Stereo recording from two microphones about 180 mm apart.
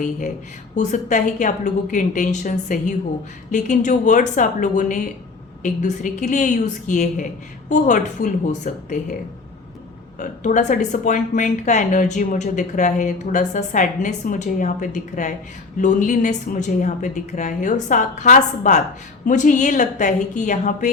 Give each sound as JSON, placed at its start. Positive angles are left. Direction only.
{"t": 0.8, "sound": "speech", "side_deg": 45}
{"t": 10.2, "sound": "speech", "side_deg": 45}